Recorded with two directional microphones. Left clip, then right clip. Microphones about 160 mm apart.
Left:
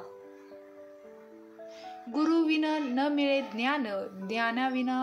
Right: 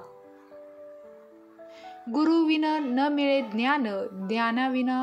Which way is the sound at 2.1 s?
30° right (ahead or behind).